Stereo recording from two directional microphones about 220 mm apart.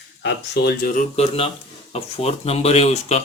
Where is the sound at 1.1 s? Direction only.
25° left (ahead or behind).